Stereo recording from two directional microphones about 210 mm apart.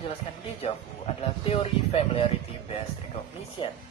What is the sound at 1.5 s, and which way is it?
Speech, 25° left (ahead or behind).